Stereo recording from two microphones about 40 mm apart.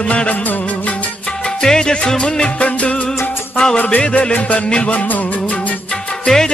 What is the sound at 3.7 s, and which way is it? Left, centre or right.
Music, left.